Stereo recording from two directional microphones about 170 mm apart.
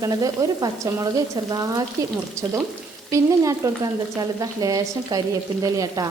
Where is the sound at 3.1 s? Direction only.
20° right (ahead or behind).